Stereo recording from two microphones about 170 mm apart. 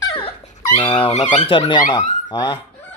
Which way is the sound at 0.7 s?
25° left (ahead or behind).